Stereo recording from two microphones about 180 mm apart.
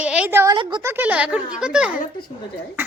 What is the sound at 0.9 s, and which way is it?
A woman's voice, 10° right (ahead or behind).